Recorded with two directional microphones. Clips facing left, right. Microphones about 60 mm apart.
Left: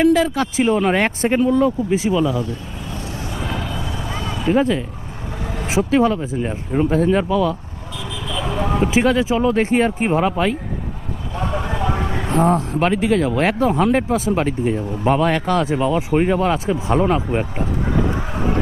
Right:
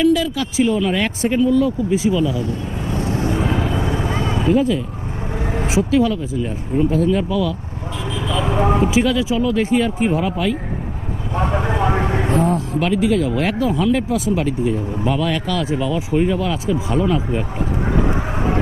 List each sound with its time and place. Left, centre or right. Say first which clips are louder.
0.0 s speech: left 1 dB; left
2.5 s vehicle: right 5 dB; right
4.5 s speech: even; left
8.3 s a sound: right 4 dB; right
8.8 s speech: even; left
11.3 s vehicle: right 4 dB; right
12.4 s speech: left 7 dB; left